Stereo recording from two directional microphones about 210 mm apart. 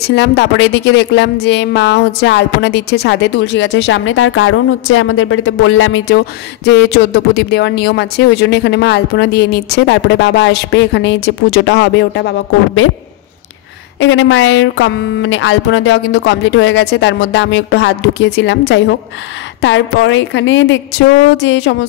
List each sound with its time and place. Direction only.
0.0 s speech: 55° left (ahead or behind); by 6.0 s 75° left (ahead or behind)
6.0 s speech: 55° left (ahead or behind)
13.9 s speech: 60° left (ahead or behind)